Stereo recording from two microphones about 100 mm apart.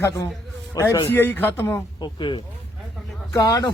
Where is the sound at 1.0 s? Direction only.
20° left (ahead or behind).